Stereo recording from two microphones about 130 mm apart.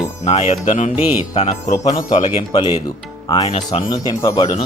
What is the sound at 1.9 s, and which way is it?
Speech, 30° left (ahead or behind).